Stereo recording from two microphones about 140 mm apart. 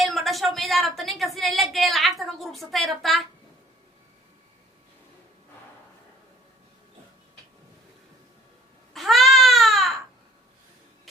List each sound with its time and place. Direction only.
0.0 s a woman's voice: centre (ahead or behind)
8.9 s baby cry: centre (ahead or behind)